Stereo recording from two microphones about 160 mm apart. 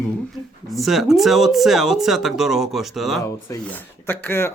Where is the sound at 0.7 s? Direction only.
Centre (ahead or behind).